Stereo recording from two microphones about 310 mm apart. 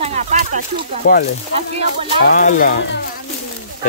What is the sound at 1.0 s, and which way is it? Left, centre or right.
Speech, left.